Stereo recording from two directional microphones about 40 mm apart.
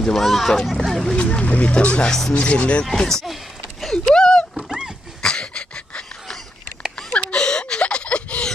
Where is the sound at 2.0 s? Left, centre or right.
Centre.